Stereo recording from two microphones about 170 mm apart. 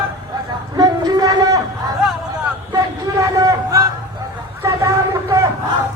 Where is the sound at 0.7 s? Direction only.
20° right (ahead or behind).